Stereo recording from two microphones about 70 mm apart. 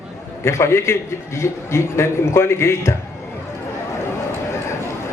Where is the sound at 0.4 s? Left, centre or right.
Left.